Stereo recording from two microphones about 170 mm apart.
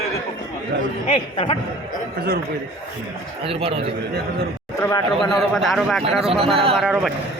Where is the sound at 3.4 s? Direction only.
35° right (ahead or behind).